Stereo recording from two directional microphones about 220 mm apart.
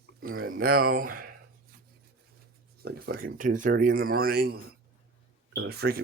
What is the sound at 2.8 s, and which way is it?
Speech, 45° right (ahead or behind).